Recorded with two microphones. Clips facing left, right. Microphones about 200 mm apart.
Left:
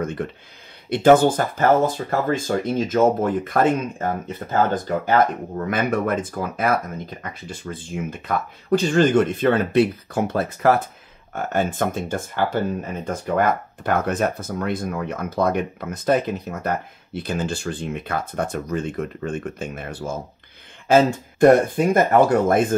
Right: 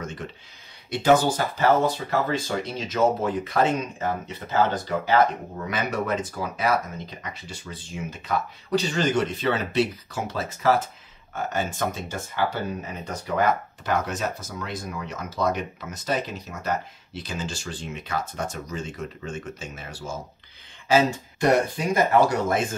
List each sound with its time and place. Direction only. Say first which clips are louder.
0.0 s speech: left 8 dB; 55° left (ahead or behind)